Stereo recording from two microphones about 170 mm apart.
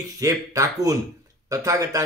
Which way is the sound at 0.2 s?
20° right (ahead or behind).